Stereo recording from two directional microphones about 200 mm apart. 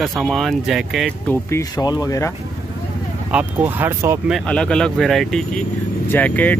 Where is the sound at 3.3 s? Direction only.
10° right (ahead or behind).